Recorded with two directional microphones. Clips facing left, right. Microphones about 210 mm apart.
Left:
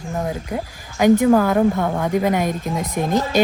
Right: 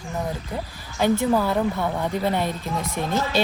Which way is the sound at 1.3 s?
45° left (ahead or behind).